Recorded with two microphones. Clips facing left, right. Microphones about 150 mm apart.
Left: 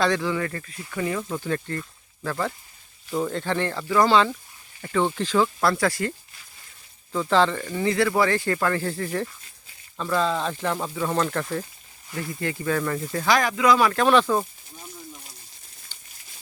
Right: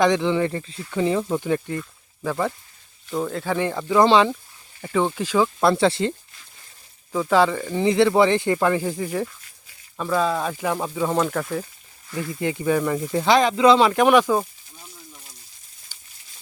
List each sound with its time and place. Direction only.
0.0 s speech: 20° right (ahead or behind)
3.1 s speech: centre (ahead or behind)
5.5 s speech: 25° right (ahead or behind)
7.1 s speech: 10° right (ahead or behind)
7.8 s speech: 20° right (ahead or behind); by 11.6 s 5° right (ahead or behind)
12.4 s speech: 20° right (ahead or behind)
15.9 s crumpling: 10° right (ahead or behind)